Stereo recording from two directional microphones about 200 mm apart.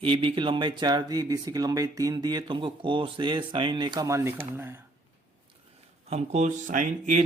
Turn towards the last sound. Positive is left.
turn(degrees=-40)  # may be behind; listen again after turning